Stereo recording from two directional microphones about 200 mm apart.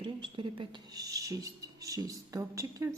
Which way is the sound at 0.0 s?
25° right (ahead or behind).